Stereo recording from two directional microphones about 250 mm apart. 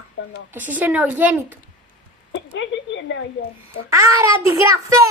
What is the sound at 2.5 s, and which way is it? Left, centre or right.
Speech, left.